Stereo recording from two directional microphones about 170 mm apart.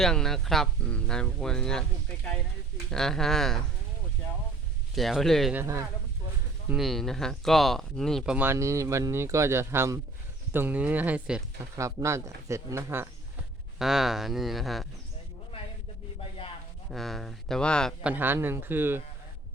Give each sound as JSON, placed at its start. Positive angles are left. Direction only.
{"t": 0.0, "sound": "speech", "side_deg": 5}
{"t": 2.9, "sound": "speech", "side_deg": 0}
{"t": 4.9, "sound": "speech", "side_deg": 0}
{"t": 5.5, "sound": "speech", "side_deg": -15}
{"t": 6.7, "sound": "speech", "side_deg": 0}
{"t": 11.8, "sound": "speech", "side_deg": -20}
{"t": 13.7, "sound": "speech", "side_deg": 0}
{"t": 16.9, "sound": "speech", "side_deg": 0}
{"t": 18.0, "sound": "speech", "side_deg": -10}